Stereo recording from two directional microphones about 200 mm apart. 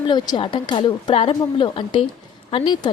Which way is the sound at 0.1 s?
20° left (ahead or behind).